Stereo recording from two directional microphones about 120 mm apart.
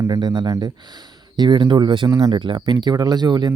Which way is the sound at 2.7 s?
35° right (ahead or behind).